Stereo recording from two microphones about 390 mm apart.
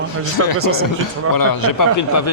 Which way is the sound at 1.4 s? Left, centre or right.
Left.